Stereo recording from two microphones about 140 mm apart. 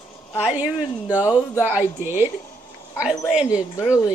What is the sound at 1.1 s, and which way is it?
A woman's voice, 10° right (ahead or behind).